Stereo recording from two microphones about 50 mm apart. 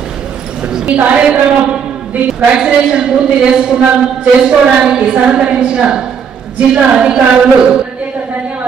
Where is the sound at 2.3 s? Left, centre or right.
Right.